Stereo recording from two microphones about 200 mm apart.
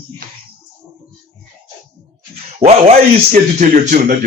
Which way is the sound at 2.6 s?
30° right (ahead or behind).